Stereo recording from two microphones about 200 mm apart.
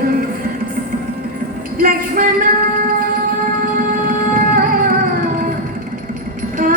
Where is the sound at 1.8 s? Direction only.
45° right (ahead or behind).